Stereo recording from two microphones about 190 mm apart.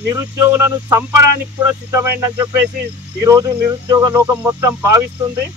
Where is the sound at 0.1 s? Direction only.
15° right (ahead or behind).